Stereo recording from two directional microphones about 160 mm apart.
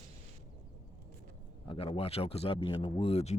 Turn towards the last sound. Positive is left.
turn(degrees=40)  # may be behind; listen again after turning